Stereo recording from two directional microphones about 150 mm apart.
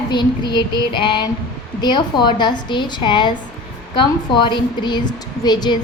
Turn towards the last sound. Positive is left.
turn(degrees=30)  # may be behind; listen again after turning